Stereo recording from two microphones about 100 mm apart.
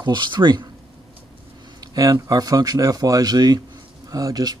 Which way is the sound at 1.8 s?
35° right (ahead or behind).